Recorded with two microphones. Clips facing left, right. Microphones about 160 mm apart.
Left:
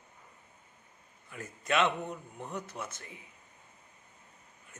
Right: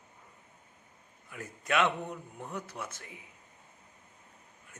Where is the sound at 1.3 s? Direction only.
10° right (ahead or behind).